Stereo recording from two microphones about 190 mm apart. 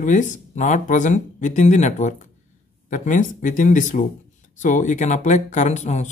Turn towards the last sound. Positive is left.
turn(degrees=35)  # may be behind; listen again after turning